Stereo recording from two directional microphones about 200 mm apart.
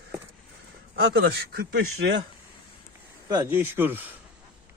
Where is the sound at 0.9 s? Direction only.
55° right (ahead or behind).